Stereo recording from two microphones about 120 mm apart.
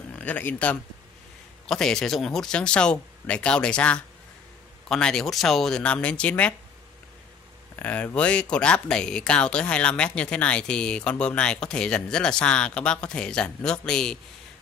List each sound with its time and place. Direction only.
0.2 s speech: 15° left (ahead or behind)
7.8 s speech: 10° left (ahead or behind)